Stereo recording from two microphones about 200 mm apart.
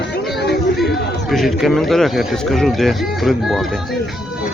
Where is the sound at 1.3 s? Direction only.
Centre (ahead or behind).